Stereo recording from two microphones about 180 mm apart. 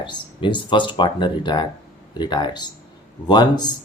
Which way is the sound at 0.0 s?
25° left (ahead or behind).